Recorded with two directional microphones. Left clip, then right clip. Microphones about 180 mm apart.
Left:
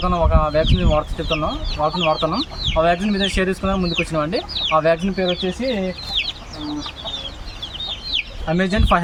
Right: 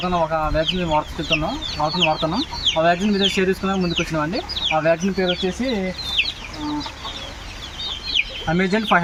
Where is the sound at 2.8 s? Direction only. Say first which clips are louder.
Even; 30° left (ahead or behind).